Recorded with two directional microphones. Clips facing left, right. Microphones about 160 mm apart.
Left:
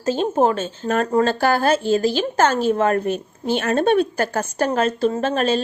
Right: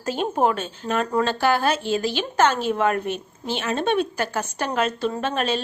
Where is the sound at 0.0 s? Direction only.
30° left (ahead or behind).